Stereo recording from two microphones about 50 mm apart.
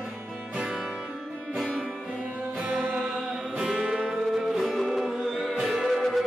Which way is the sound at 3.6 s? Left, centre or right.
Centre.